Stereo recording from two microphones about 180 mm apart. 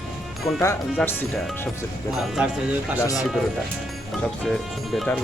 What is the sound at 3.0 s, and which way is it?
Speech, 20° left (ahead or behind).